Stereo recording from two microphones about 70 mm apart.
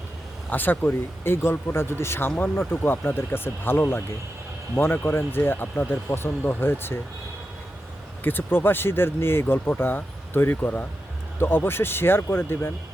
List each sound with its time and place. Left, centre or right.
0.5 s speech: left
2.3 s speech: left
8.2 s speech: left